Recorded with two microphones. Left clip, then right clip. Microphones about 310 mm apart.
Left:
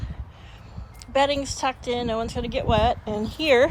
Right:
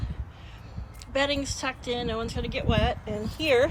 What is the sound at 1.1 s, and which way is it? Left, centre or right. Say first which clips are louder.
Speech: left 5 dB; centre.